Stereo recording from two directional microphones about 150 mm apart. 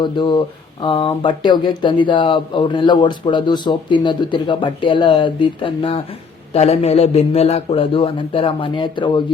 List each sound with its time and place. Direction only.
0.0 s speech: 30° left (ahead or behind)